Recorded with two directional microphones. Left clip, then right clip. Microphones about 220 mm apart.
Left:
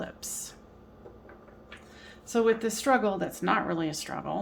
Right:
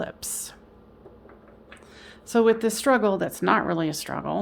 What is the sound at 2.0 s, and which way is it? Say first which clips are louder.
A woman's voice: right 6 dB; 50° right (ahead or behind).